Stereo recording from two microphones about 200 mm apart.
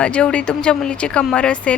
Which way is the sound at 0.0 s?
5° left (ahead or behind).